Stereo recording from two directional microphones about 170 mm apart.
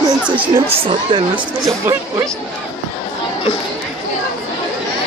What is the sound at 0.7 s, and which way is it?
Speech, 35° right (ahead or behind).